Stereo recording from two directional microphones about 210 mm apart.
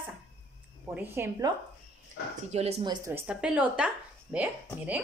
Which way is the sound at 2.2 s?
50° left (ahead or behind).